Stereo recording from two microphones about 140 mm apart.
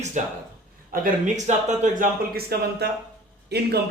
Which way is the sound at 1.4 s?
65° right (ahead or behind).